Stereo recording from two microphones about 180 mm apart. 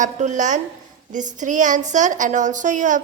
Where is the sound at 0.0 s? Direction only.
40° right (ahead or behind).